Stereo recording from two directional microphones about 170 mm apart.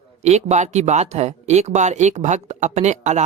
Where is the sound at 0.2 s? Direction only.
40° right (ahead or behind).